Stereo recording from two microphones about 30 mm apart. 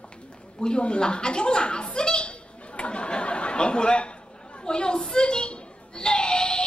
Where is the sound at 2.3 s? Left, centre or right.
Left.